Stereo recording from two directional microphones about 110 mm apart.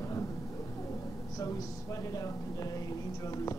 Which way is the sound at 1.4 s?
30° left (ahead or behind).